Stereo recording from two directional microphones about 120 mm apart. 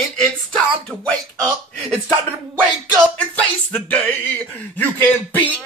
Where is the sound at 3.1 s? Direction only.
15° left (ahead or behind).